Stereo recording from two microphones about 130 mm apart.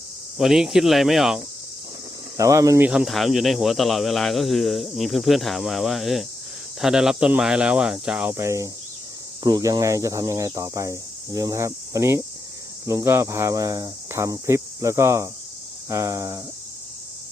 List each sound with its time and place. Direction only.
0.3 s speech: 5° right (ahead or behind)
2.4 s speech: 25° right (ahead or behind)
2.8 s speech: 5° right (ahead or behind)
8.4 s speech: 25° right (ahead or behind)